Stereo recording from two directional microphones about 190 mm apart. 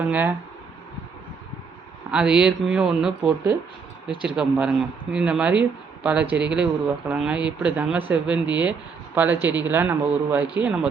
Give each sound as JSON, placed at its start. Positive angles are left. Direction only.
{"t": 0.0, "sound": "speech", "side_deg": -10}
{"t": 2.0, "sound": "speech", "side_deg": -5}
{"t": 4.4, "sound": "speech", "side_deg": -5}